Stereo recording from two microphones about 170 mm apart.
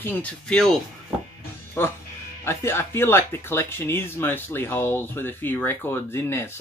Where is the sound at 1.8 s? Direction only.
15° left (ahead or behind).